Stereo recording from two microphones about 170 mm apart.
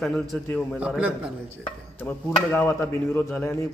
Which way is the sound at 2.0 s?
10° left (ahead or behind).